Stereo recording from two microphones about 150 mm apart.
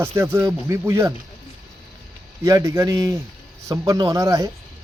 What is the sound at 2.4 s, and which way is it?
Music, 20° right (ahead or behind).